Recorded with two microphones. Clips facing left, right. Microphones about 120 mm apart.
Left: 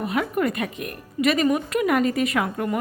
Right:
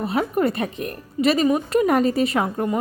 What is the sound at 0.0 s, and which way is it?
Speech, 30° right (ahead or behind).